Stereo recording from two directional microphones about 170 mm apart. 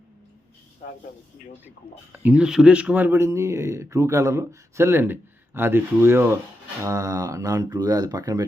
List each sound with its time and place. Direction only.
2.1 s a man's voice: 10° right (ahead or behind)